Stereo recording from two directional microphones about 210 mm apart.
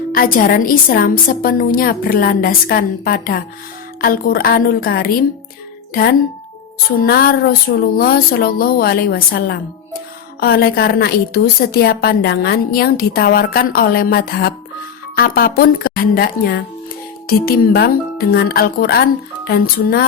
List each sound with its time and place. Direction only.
0.2 s a woman's voice: 40° left (ahead or behind)
7.0 s a woman's voice: 45° left (ahead or behind)